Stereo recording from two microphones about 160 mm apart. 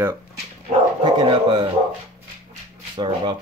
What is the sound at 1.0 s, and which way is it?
Speech, 30° right (ahead or behind).